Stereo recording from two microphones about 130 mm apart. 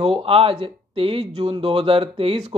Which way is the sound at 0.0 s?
45° right (ahead or behind).